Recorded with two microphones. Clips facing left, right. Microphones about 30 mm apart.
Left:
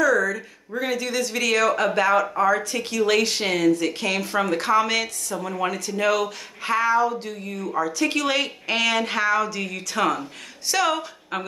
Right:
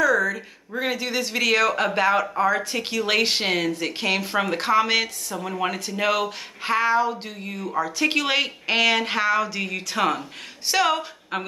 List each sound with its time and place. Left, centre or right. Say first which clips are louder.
0.0 s a woman's voice: even; right
5.7 s a woman's voice: left 2 dB; right